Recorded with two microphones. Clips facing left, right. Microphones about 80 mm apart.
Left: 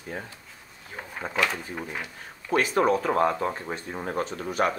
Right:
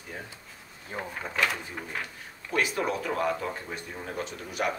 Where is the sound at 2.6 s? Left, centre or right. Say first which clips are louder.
Left 6 dB; left.